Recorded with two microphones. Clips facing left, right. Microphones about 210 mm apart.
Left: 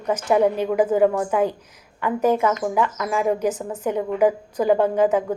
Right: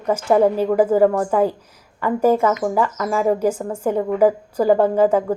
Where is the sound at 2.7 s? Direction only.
35° right (ahead or behind).